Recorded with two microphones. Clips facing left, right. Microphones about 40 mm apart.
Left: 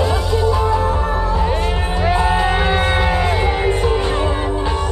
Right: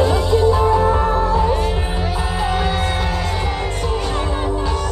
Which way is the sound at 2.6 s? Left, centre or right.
Left.